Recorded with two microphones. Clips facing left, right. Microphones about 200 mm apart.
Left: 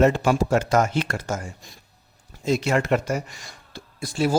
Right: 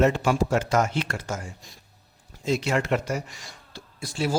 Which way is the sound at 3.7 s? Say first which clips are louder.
Left 5 dB; 50° left (ahead or behind).